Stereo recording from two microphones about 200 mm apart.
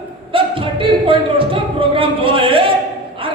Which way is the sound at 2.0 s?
25° right (ahead or behind).